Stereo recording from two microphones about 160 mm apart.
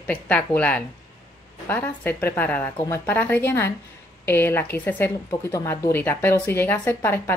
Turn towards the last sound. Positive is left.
turn(degrees=15)  # may be behind; listen again after turning